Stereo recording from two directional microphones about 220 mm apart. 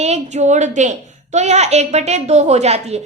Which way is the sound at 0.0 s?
30° right (ahead or behind).